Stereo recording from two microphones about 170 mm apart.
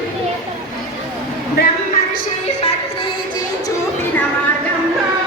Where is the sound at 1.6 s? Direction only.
65° left (ahead or behind).